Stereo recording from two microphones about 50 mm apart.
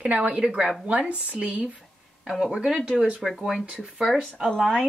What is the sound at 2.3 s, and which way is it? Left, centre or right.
Speech, centre.